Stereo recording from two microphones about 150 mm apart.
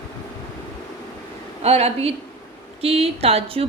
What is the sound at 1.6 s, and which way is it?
A woman's voice, 45° right (ahead or behind).